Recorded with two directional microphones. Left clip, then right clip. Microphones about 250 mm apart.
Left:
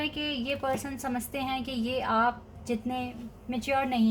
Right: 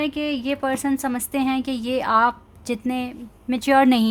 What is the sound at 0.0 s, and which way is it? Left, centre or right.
A woman's voice, right.